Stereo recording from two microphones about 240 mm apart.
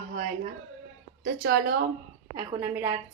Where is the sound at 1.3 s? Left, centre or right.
Right.